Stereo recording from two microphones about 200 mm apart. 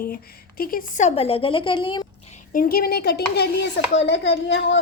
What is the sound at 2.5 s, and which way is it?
Speech, 45° left (ahead or behind).